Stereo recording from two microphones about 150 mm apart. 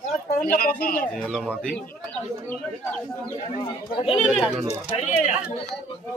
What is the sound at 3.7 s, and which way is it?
Speech, 35° left (ahead or behind).